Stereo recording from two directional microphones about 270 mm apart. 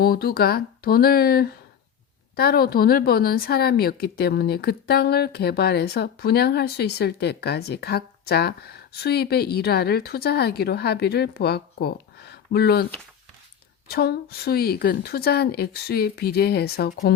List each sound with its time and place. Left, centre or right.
0.0 s a woman's voice: left